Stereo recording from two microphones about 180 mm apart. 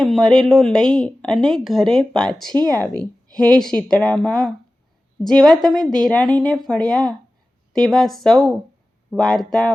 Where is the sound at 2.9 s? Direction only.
5° left (ahead or behind).